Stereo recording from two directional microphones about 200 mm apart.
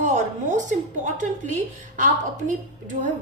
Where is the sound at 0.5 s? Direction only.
40° right (ahead or behind).